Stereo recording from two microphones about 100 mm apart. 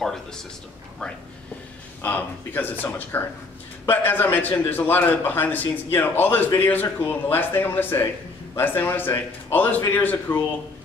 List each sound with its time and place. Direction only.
0.0 s speech: 5° left (ahead or behind)
2.0 s a man's voice: 20° left (ahead or behind)